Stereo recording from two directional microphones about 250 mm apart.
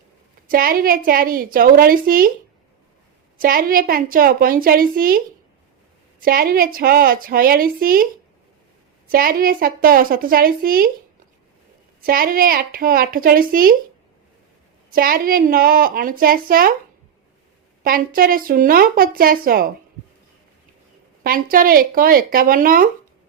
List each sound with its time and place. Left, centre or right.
0.4 s a woman's voice: right
3.3 s a woman's voice: right
6.2 s a woman's voice: right
9.0 s a woman's voice: right
12.0 s a woman's voice: right
14.8 s a woman's voice: right
17.8 s a woman's voice: right
21.2 s a woman's voice: right